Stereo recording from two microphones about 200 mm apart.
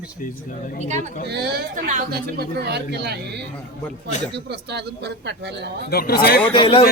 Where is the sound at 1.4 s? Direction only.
40° right (ahead or behind).